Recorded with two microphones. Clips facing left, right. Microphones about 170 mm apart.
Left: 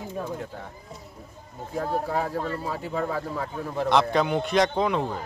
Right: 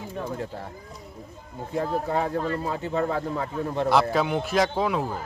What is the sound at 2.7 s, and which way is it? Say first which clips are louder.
A man's voice: right 2 dB; 5° left (ahead or behind).